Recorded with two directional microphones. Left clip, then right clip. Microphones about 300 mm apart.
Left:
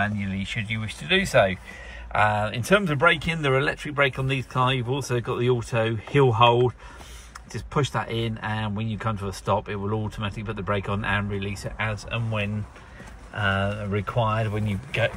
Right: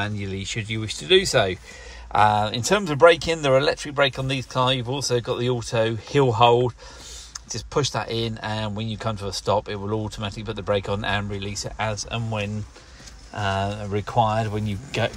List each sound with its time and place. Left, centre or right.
0.2 s speech: centre